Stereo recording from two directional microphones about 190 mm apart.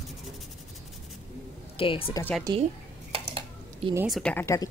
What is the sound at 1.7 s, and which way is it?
Speech, 30° left (ahead or behind).